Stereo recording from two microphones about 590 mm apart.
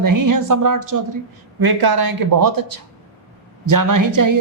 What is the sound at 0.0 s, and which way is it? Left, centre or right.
Speech, right.